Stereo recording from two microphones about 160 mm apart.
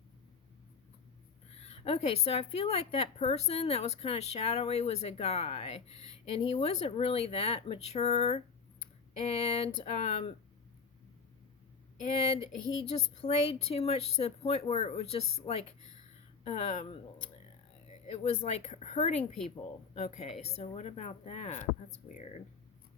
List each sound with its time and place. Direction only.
1.5 s a woman's voice: 40° left (ahead or behind)
12.4 s a woman's voice: 40° left (ahead or behind)
18.0 s speech: 45° left (ahead or behind)